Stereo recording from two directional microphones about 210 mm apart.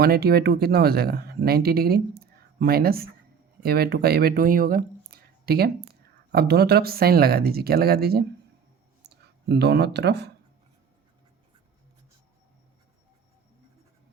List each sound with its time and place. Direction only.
0.0 s speech: 50° right (ahead or behind)